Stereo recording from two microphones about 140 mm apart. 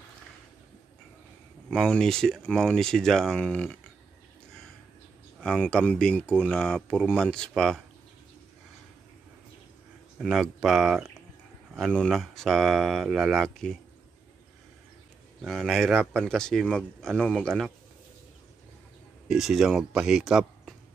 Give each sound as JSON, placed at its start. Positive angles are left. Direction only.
{"t": 1.7, "sound": "speech", "side_deg": 5}
{"t": 5.4, "sound": "speech", "side_deg": 5}
{"t": 10.1, "sound": "speech", "side_deg": 0}
{"t": 15.4, "sound": "speech", "side_deg": 0}
{"t": 19.2, "sound": "speech", "side_deg": 0}